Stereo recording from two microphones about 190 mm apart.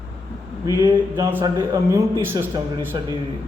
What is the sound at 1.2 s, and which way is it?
A man's voice, 10° right (ahead or behind).